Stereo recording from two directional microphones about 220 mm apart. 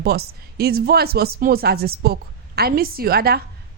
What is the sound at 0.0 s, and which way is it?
Speech, 45° right (ahead or behind).